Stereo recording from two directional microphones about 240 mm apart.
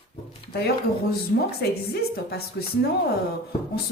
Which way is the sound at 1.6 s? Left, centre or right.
Left.